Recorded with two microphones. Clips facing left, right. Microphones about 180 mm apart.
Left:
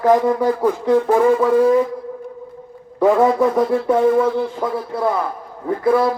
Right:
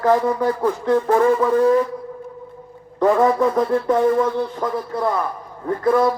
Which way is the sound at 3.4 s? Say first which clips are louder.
Left 2 dB; 10° left (ahead or behind).